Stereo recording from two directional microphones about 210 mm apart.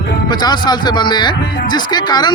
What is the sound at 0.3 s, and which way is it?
A man's voice, 20° left (ahead or behind).